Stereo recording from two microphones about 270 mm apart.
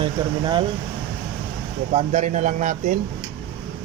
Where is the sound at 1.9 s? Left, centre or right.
Right.